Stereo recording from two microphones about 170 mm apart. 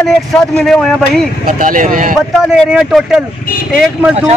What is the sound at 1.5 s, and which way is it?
Speech, 55° right (ahead or behind).